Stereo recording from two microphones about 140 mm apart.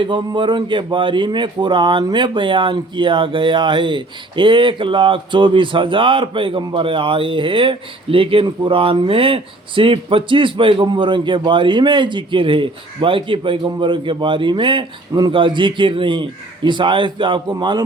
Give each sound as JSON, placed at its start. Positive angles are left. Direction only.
{"t": 0.0, "sound": "speech", "side_deg": -35}